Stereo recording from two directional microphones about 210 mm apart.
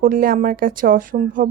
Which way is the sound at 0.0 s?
45° right (ahead or behind).